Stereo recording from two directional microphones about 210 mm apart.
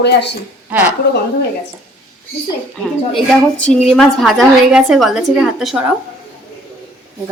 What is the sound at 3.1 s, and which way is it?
A woman's voice, 5° left (ahead or behind).